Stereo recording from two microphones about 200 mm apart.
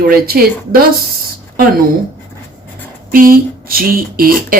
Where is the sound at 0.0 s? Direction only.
50° right (ahead or behind).